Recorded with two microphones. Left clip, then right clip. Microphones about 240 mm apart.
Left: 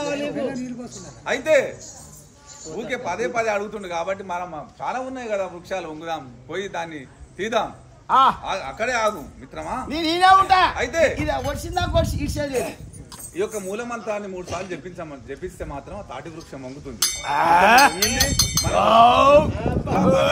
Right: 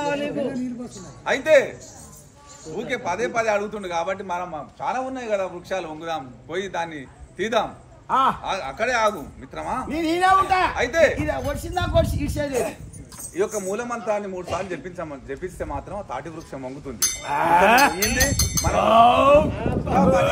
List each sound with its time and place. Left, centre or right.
0.0 s a sound: centre
1.2 s a man's voice: centre
2.7 s a man's voice: centre
8.1 s cowbell: centre
8.5 s a man's voice: centre
9.8 s cowbell: centre
10.7 s a man's voice: centre
11.1 s a man's voice: centre
13.4 s a man's voice: centre
14.4 s a man's voice: right
14.7 s a man's voice: centre
17.0 s cowbell: centre